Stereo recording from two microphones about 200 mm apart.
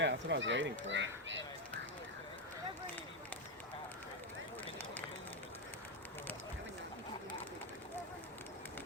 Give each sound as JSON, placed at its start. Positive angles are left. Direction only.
{"t": 0.0, "sound": "speech", "side_deg": -65}